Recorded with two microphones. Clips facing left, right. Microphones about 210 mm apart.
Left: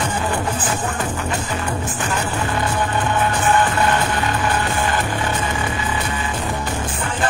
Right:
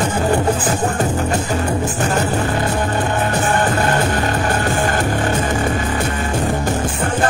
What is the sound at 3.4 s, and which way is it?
Music, 40° right (ahead or behind).